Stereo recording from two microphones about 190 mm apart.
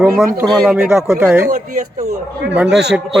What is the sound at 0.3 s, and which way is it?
Speech, centre (ahead or behind).